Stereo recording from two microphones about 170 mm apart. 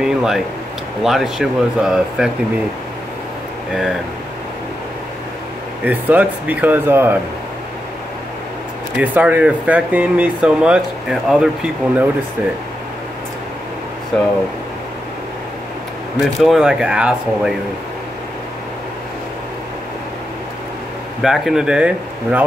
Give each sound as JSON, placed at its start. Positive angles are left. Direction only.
{"t": 0.0, "sound": "a sound", "side_deg": -5}
{"t": 1.0, "sound": "speech", "side_deg": 0}
{"t": 5.9, "sound": "speech", "side_deg": -10}
{"t": 8.9, "sound": "speech", "side_deg": -10}
{"t": 16.2, "sound": "speech", "side_deg": 0}
{"t": 21.2, "sound": "speech", "side_deg": 0}